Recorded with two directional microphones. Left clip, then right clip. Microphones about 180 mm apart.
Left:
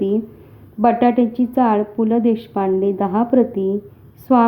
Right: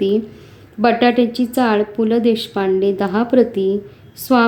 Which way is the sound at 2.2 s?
25° left (ahead or behind).